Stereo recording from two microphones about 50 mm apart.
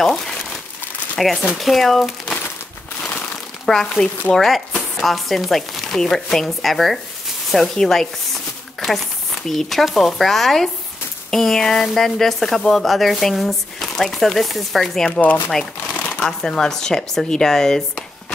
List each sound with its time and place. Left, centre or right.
0.0 s crumpling: centre
1.1 s speech: centre
3.0 s a sound: left
3.6 s speech: centre
9.5 s speech: centre
15.9 s shuffling cards: left
16.2 s speech: centre